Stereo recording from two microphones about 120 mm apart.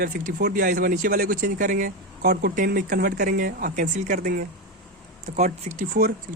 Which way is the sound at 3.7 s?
90° right.